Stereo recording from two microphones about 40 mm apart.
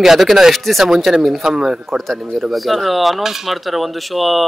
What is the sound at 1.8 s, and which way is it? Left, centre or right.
Speech, centre.